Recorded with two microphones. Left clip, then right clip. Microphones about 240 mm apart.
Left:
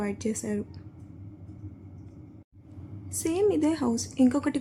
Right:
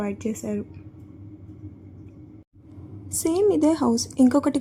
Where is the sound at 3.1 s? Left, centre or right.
Centre.